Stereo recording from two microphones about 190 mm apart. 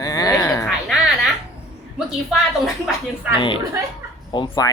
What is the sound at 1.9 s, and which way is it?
Speech, centre (ahead or behind).